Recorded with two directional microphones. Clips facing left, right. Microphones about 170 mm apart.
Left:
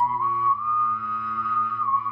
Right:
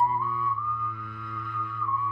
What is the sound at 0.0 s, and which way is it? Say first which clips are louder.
Music: left 2 dB; 40° right (ahead or behind).